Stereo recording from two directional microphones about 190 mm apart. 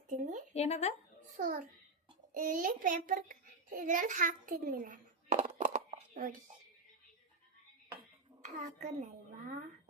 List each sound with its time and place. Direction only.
0.1 s a sound: 40° right (ahead or behind)
0.5 s speech: 35° left (ahead or behind)
1.4 s a child's voice: 45° right (ahead or behind)
8.4 s a child's voice: 40° right (ahead or behind)